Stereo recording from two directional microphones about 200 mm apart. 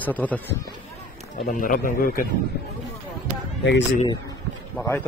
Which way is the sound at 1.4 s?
45° left (ahead or behind).